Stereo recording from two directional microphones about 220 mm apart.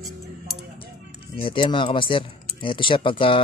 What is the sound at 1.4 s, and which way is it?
A man's voice, 20° left (ahead or behind).